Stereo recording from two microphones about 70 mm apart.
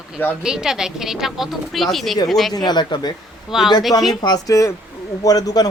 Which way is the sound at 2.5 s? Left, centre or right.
Left.